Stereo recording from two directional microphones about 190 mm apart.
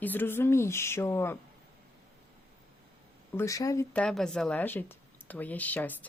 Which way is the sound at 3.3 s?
15° left (ahead or behind).